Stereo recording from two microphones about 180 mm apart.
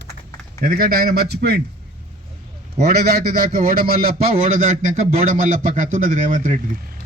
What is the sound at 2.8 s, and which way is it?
Speech, 60° right (ahead or behind).